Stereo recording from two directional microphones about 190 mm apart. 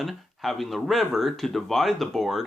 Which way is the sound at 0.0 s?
Centre (ahead or behind).